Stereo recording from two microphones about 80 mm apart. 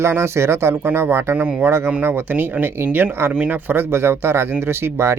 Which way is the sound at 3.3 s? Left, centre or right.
Centre.